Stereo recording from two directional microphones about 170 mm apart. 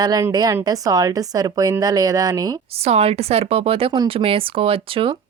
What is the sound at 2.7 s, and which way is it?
Speech, 40° right (ahead or behind).